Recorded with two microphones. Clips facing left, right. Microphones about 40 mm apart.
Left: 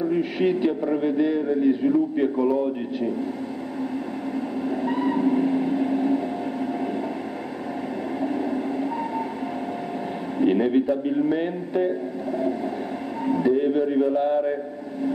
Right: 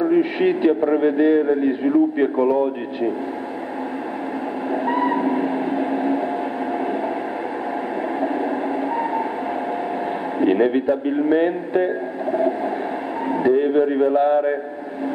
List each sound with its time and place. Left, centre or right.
0.1 s speech: right
4.8 s a sound: right
8.2 s train: right
10.4 s speech: right